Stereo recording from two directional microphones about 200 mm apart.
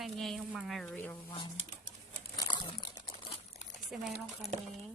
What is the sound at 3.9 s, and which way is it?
Speech, centre (ahead or behind).